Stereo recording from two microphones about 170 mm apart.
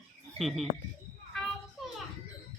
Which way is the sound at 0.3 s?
Centre (ahead or behind).